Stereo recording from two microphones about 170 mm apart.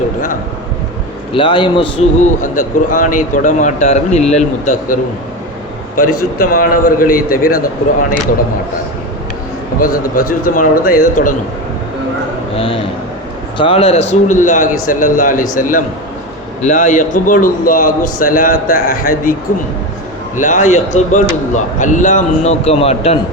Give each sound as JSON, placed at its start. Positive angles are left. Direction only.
{"t": 1.3, "sound": "a man's voice", "side_deg": 30}
{"t": 2.4, "sound": "speech", "side_deg": 50}
{"t": 6.4, "sound": "speech", "side_deg": 55}
{"t": 9.8, "sound": "speech", "side_deg": 55}
{"t": 12.5, "sound": "a man's voice", "side_deg": 30}